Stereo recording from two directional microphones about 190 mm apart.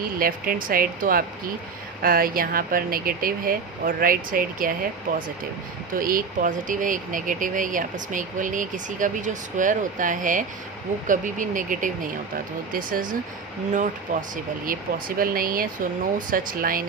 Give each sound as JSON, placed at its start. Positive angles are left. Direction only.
{"t": 0.2, "sound": "speech", "side_deg": -50}
{"t": 5.9, "sound": "speech", "side_deg": -45}